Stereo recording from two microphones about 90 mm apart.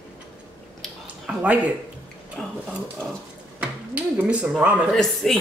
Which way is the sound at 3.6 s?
15° right (ahead or behind).